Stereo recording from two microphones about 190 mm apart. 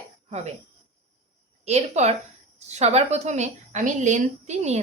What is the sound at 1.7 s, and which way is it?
Speech, 35° right (ahead or behind).